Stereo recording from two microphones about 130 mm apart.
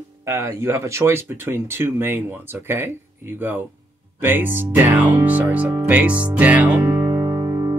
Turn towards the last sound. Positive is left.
turn(degrees=-30)  # may be behind; listen again after turning